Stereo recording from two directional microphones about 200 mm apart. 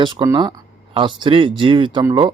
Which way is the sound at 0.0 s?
20° right (ahead or behind).